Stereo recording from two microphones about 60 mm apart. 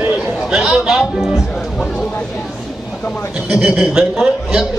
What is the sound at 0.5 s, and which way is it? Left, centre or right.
Music, centre.